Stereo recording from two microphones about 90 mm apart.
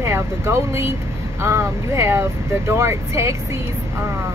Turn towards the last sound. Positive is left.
turn(degrees=-30)  # may be behind; listen again after turning